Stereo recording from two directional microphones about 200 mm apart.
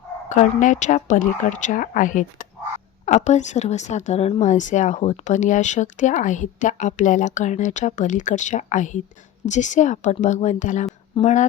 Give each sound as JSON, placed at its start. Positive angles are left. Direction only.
{"t": 0.3, "sound": "speech", "side_deg": 40}